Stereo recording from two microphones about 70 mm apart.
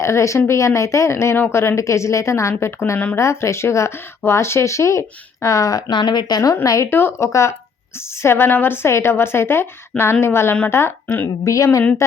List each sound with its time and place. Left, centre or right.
0.0 s speech: left
5.9 s a woman's voice: left
6.5 s a woman's voice: left
11.4 s speech: left